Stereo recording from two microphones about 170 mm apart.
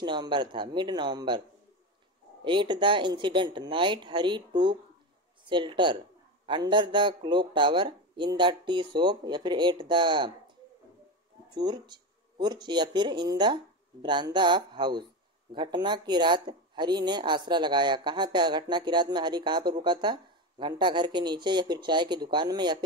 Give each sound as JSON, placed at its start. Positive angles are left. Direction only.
{"t": 0.0, "sound": "speech", "side_deg": -25}
{"t": 2.4, "sound": "speech", "side_deg": -30}
{"t": 11.5, "sound": "speech", "side_deg": -25}